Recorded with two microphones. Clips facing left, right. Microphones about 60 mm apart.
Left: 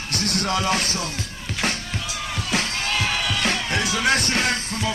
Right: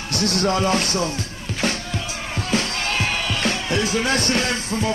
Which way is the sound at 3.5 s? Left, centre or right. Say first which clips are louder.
Right 3 dB; left.